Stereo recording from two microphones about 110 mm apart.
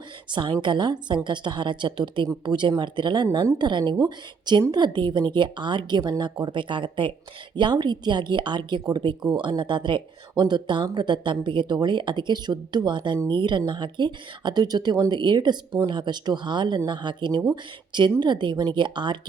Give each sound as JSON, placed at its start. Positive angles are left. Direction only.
{"t": 0.3, "sound": "a woman's voice", "side_deg": -45}